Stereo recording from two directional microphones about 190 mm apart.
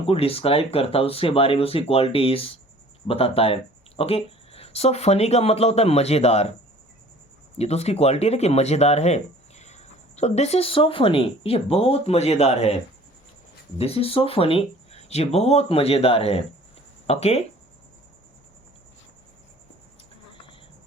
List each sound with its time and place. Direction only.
0.1 s speech: 30° left (ahead or behind)
7.6 s speech: 35° left (ahead or behind)